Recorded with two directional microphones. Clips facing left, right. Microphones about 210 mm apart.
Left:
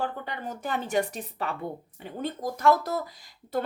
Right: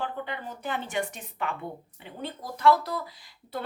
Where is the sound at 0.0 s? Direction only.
45° left (ahead or behind).